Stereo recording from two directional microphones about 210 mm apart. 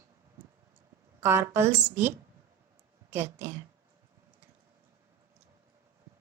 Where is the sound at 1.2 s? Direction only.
10° right (ahead or behind).